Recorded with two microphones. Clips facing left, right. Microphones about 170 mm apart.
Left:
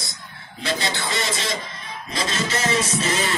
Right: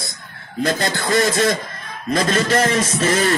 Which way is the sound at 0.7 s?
50° right (ahead or behind).